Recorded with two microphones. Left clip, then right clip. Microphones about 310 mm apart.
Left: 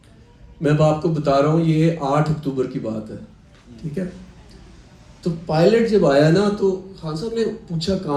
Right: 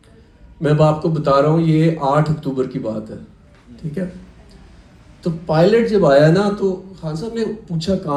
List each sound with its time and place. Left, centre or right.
0.6 s a man's voice: centre
5.2 s a man's voice: centre